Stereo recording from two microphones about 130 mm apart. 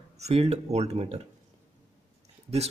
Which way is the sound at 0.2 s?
50° right (ahead or behind).